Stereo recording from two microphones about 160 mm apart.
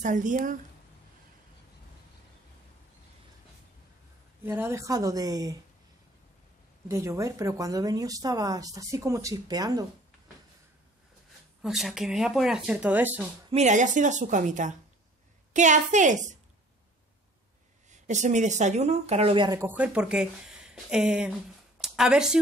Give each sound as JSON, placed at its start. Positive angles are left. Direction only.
{"t": 0.0, "sound": "speech", "side_deg": -55}
{"t": 4.4, "sound": "speech", "side_deg": -15}
{"t": 6.9, "sound": "speech", "side_deg": -20}
{"t": 11.6, "sound": "speech", "side_deg": 0}
{"t": 13.5, "sound": "speech", "side_deg": -45}
{"t": 17.8, "sound": "speech", "side_deg": -50}
{"t": 19.7, "sound": "speech", "side_deg": -10}